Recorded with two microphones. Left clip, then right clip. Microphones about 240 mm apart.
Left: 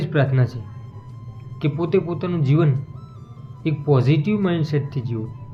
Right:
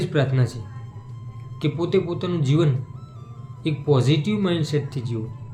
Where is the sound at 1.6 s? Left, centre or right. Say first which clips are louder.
Left 1 dB; centre.